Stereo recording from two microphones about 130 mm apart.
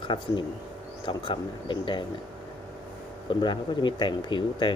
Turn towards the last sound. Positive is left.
turn(degrees=40)  # may be behind; listen again after turning